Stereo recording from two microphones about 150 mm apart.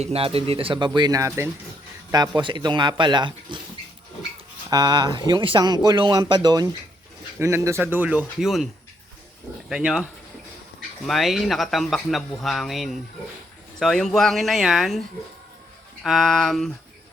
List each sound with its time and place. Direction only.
0.0 s speech: 40° right (ahead or behind)
4.7 s speech: 25° right (ahead or behind); by 8.6 s 5° right (ahead or behind)
9.6 s speech: 5° right (ahead or behind)
16.0 s speech: centre (ahead or behind)